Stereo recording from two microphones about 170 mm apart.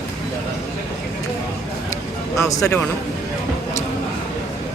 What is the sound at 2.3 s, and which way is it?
Speech, 15° left (ahead or behind).